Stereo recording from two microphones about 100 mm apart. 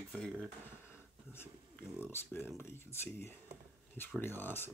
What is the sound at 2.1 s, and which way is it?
Speech, 25° left (ahead or behind).